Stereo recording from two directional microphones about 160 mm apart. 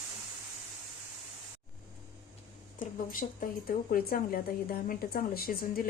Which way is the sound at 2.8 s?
60° left (ahead or behind).